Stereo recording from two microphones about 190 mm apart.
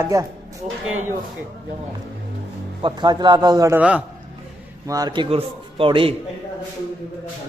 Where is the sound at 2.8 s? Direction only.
25° right (ahead or behind); by 4.0 s 5° right (ahead or behind).